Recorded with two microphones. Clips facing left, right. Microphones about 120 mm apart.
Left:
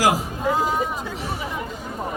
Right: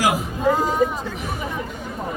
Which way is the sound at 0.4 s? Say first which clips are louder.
Right 3 dB; 5° left (ahead or behind).